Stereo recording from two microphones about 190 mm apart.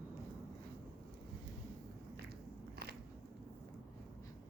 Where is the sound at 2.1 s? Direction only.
55° right (ahead or behind).